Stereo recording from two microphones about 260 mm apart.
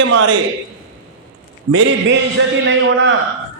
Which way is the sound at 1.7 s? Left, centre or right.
Right.